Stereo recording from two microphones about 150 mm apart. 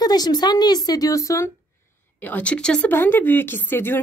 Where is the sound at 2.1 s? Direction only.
10° left (ahead or behind).